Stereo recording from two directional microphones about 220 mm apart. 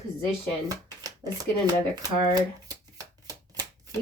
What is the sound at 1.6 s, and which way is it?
Speech, 15° right (ahead or behind).